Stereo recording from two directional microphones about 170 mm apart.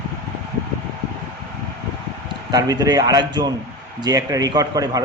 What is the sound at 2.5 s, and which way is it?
A man's voice, 20° right (ahead or behind).